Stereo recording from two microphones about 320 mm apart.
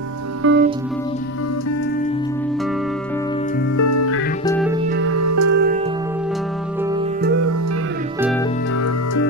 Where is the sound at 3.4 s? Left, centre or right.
Left.